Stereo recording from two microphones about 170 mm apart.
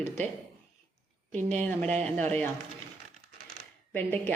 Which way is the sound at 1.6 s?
10° left (ahead or behind).